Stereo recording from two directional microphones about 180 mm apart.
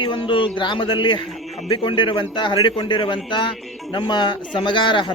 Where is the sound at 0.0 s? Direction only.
25° left (ahead or behind).